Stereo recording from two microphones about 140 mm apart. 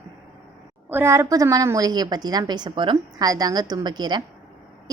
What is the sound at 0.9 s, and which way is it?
A woman's voice, 15° right (ahead or behind).